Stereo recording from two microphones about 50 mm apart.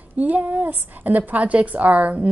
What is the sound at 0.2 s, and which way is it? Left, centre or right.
A woman's voice, right.